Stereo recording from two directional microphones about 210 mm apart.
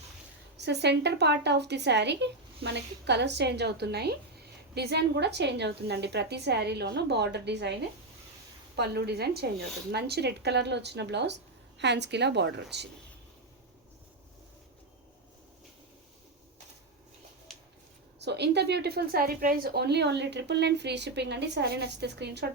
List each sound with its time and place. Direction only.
0.5 s a woman's voice: 55° right (ahead or behind)
17.5 s a sound: centre (ahead or behind)
18.2 s a woman's voice: 55° right (ahead or behind)